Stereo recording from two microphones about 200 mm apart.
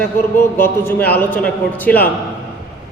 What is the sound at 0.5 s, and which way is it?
A man's voice, 10° left (ahead or behind).